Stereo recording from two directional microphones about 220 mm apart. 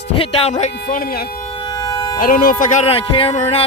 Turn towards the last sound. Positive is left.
turn(degrees=30)  # may be behind; listen again after turning